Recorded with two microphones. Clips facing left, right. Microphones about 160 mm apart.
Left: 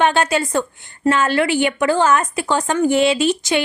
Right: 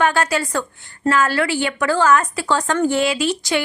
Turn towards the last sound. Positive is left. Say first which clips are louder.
# left 3 dB
turn(degrees=20)  # may be behind; listen again after turning